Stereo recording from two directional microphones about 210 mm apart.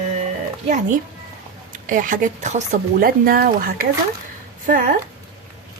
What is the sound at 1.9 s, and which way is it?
Speech, 40° right (ahead or behind).